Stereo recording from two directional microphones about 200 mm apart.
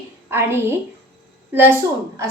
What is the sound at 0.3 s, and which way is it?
Speech, 10° right (ahead or behind).